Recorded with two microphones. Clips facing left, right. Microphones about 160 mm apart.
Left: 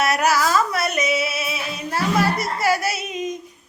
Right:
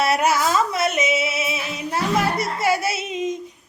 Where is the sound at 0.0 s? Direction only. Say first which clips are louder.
Even; 25° right (ahead or behind).